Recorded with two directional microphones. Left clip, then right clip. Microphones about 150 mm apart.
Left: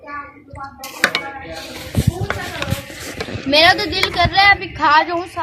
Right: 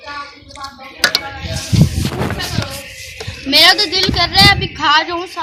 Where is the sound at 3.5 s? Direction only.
60° left (ahead or behind).